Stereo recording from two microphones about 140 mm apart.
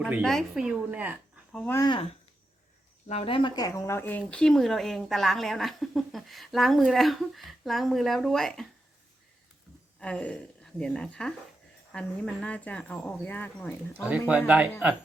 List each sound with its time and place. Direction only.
0.0 s speech: centre (ahead or behind)
3.1 s speech: 45° left (ahead or behind); by 4.2 s 15° left (ahead or behind)
4.3 s speech: 5° left (ahead or behind)
10.0 s speech: 10° left (ahead or behind)
14.1 s speech: 10° right (ahead or behind)